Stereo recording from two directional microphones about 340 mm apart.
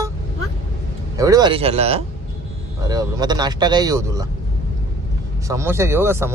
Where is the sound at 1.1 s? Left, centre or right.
Centre.